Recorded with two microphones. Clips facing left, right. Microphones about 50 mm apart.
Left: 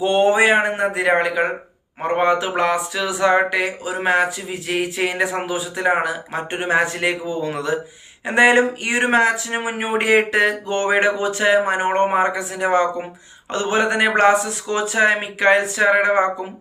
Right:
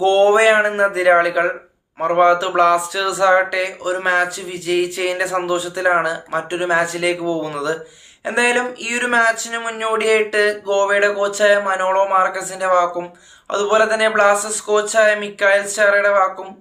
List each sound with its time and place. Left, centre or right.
0.0 s speech: centre; by 16.3 s left